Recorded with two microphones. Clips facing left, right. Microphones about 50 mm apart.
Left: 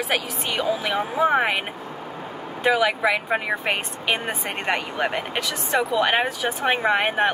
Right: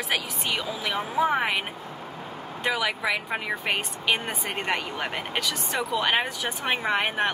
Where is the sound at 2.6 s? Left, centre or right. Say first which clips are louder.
Left 6 dB; centre.